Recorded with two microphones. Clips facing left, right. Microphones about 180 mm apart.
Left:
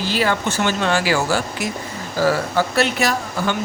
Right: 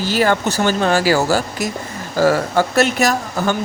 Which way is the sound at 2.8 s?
45° right (ahead or behind).